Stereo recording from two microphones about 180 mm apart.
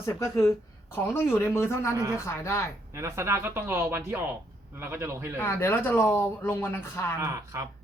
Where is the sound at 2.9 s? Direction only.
15° right (ahead or behind).